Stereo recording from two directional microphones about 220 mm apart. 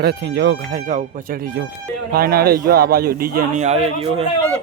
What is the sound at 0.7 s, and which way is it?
A man's voice, 35° right (ahead or behind).